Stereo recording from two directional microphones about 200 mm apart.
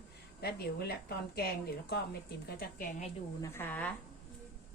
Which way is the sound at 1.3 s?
50° left (ahead or behind).